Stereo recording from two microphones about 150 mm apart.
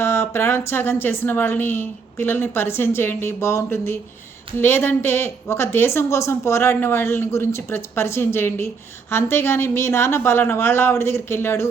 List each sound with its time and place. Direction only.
0.0 s a woman's voice: 15° left (ahead or behind)